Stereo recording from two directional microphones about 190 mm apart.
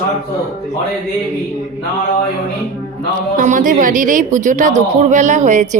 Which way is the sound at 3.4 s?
45° right (ahead or behind).